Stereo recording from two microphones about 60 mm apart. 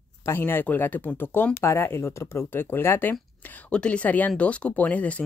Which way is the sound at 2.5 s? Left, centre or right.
Left.